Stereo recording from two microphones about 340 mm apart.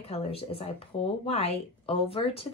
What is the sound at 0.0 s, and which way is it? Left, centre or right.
Speech, centre.